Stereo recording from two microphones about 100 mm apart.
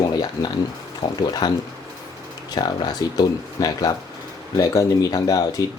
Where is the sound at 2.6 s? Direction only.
45° left (ahead or behind).